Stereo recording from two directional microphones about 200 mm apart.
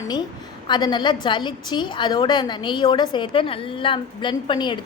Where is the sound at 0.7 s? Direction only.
25° left (ahead or behind).